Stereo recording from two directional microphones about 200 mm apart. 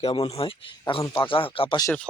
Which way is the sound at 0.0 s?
30° left (ahead or behind).